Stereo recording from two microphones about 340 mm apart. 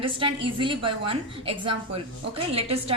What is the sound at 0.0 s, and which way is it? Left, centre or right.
Speech, centre.